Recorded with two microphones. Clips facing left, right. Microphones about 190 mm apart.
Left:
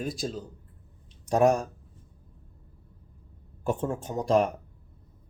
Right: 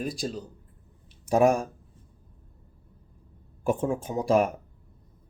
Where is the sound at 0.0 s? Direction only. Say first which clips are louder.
Right 1 dB; centre (ahead or behind).